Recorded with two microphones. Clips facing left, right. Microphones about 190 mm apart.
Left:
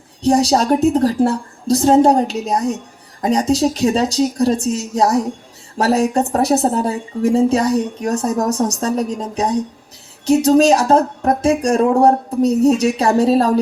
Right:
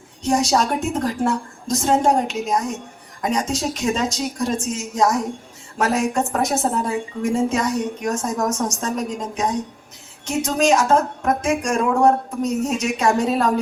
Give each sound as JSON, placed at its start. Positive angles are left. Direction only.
{"t": 0.2, "sound": "speech", "side_deg": 35}